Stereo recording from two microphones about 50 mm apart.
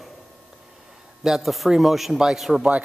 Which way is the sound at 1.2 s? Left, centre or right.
Centre.